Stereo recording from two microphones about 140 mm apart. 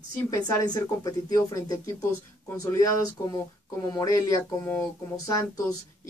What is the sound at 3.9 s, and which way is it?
A woman's voice, 20° left (ahead or behind).